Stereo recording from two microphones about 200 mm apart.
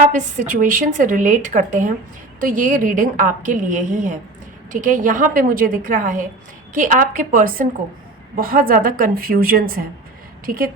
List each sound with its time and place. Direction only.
0.1 s a woman's voice: 40° right (ahead or behind)